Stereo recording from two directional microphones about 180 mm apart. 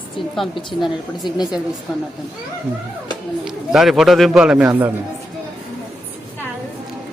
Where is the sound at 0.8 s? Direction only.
Centre (ahead or behind).